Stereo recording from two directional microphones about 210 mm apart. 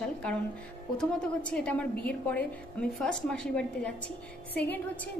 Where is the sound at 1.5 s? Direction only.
5° left (ahead or behind).